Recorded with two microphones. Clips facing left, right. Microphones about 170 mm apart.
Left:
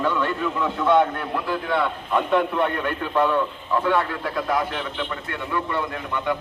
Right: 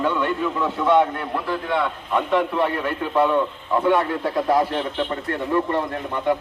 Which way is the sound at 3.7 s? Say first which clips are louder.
Right 3 dB; 25° right (ahead or behind).